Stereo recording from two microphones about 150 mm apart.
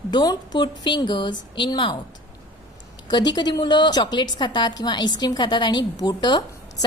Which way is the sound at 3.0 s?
30° left (ahead or behind).